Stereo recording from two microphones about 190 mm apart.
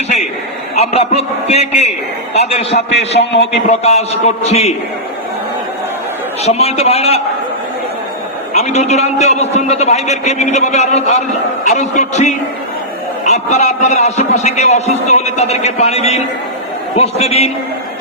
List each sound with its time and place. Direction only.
0.8 s a man's voice: 35° left (ahead or behind)
3.2 s a man's voice: 65° left (ahead or behind)
3.7 s a man's voice: 35° left (ahead or behind)
6.4 s a man's voice: 35° left (ahead or behind)
8.5 s a man's voice: 35° left (ahead or behind)